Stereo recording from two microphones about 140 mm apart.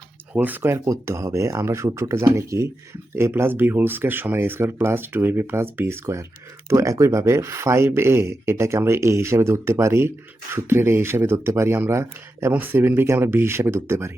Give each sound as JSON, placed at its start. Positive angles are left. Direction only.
{"t": 0.3, "sound": "speech", "side_deg": -10}